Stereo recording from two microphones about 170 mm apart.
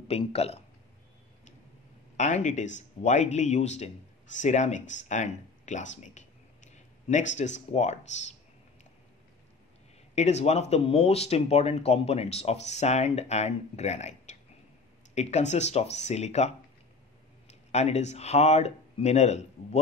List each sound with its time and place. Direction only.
0.1 s speech: 35° left (ahead or behind)
2.1 s speech: 45° left (ahead or behind)
6.7 s a sound: 45° left (ahead or behind)
7.3 s speech: 45° left (ahead or behind)
10.1 s speech: 40° left (ahead or behind)